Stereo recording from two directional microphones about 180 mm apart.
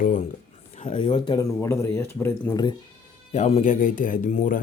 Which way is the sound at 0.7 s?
40° left (ahead or behind).